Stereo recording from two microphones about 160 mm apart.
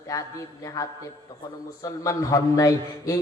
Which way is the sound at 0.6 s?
20° left (ahead or behind).